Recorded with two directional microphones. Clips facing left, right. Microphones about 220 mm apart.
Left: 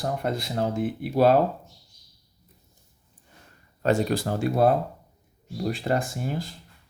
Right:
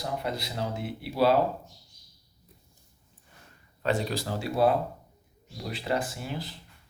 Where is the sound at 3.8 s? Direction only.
50° left (ahead or behind).